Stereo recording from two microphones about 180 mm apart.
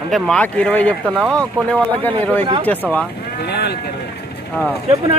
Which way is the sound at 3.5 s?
65° left (ahead or behind).